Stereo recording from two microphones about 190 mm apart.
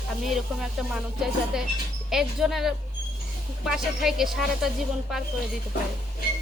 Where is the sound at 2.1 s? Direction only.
Centre (ahead or behind).